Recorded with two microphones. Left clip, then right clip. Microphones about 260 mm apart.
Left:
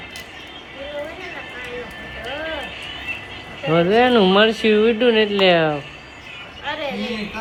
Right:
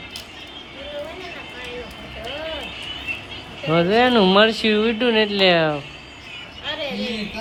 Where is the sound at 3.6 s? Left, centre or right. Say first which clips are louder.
Left 1 dB; centre.